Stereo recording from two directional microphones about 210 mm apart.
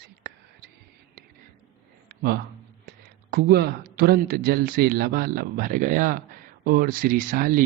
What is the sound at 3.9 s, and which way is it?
A man's voice, 45° right (ahead or behind).